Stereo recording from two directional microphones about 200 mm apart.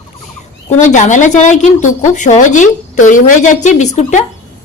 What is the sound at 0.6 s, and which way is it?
Speech, 35° left (ahead or behind).